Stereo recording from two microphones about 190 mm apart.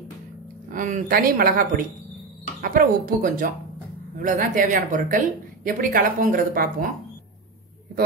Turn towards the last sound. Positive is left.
turn(degrees=-50)  # may be behind; listen again after turning